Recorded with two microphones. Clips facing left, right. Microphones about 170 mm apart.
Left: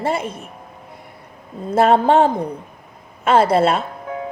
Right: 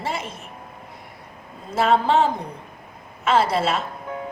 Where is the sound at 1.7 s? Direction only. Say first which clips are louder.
Left 5 dB; 55° left (ahead or behind).